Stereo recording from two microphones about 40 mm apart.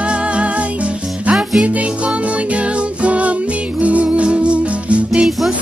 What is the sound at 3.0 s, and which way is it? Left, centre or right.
Music, right.